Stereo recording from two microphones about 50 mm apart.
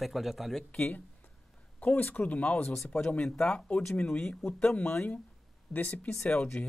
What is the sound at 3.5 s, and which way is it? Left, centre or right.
Speech, left.